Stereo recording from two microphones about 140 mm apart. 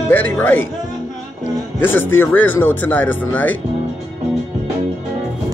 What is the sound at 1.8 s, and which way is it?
Speech, 15° left (ahead or behind).